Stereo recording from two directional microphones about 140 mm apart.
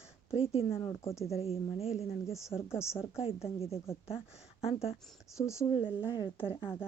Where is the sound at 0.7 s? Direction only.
20° left (ahead or behind).